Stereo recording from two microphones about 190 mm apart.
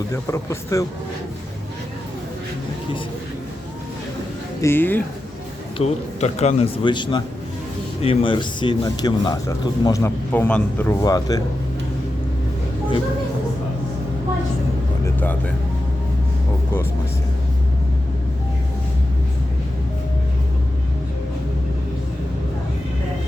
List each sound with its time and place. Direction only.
0.1 s speech: 15° left (ahead or behind)
4.6 s speech: 10° left (ahead or behind)
5.7 s speech: 35° left (ahead or behind); by 11.4 s 20° left (ahead or behind)